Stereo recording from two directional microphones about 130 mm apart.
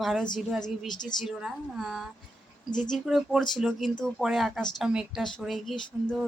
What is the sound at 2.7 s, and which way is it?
Speech, 35° left (ahead or behind).